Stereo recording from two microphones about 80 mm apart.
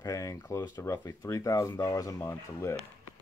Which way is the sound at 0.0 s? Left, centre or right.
Left.